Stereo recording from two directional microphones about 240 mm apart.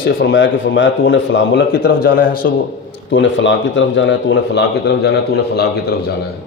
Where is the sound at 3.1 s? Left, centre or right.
Left.